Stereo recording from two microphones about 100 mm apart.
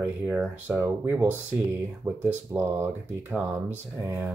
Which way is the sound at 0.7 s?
25° right (ahead or behind).